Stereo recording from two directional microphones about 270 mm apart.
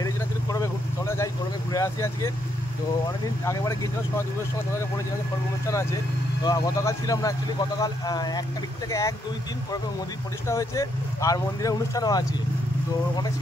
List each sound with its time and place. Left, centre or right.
0.0 s vehicle: centre
3.4 s speech: centre
6.4 s speech: centre
10.4 s speech: centre